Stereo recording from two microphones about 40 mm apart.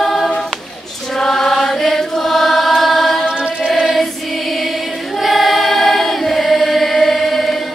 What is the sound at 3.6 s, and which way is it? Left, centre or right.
Choir, centre.